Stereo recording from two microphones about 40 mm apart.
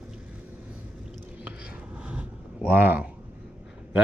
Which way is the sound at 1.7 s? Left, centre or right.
Right.